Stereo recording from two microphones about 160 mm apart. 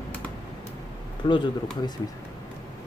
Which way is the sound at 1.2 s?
30° left (ahead or behind).